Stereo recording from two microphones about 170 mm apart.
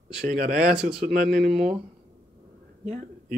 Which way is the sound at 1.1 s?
55° right (ahead or behind).